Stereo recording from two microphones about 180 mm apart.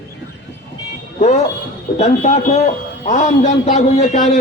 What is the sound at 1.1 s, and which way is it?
A man's voice, 40° left (ahead or behind).